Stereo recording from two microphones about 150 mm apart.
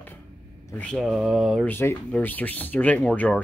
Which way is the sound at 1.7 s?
15° left (ahead or behind).